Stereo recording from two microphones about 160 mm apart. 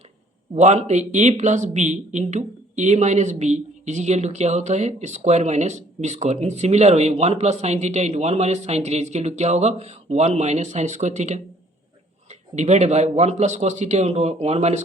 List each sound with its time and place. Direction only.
0.5 s speech: 45° right (ahead or behind)